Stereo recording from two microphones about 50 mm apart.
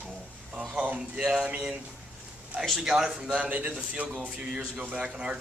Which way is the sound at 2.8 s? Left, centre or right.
Centre.